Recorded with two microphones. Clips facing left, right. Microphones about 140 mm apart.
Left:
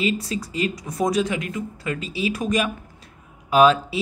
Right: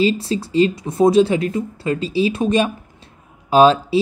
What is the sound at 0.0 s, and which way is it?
Speech, 30° right (ahead or behind).